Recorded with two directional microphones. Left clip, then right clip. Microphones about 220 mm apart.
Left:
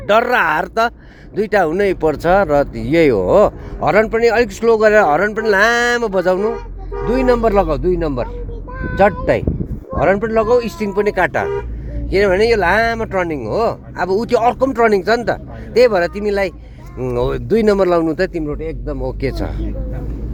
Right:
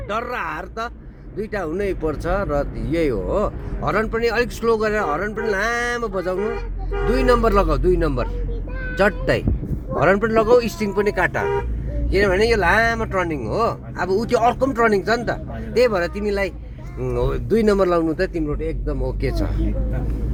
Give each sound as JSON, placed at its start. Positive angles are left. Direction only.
{"t": 0.1, "sound": "speech", "side_deg": 45}
{"t": 7.0, "sound": "speech", "side_deg": 30}